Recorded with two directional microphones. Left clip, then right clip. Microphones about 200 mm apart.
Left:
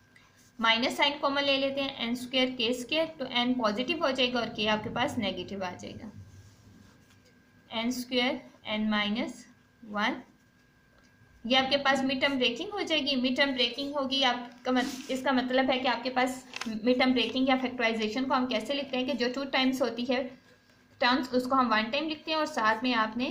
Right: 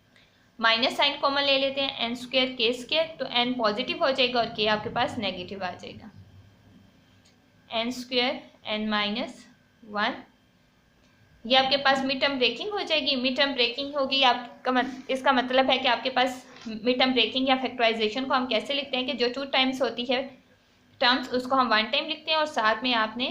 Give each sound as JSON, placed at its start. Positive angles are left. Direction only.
{"t": 0.6, "sound": "a woman's voice", "side_deg": 20}
{"t": 7.7, "sound": "a woman's voice", "side_deg": 20}
{"t": 11.4, "sound": "a woman's voice", "side_deg": 20}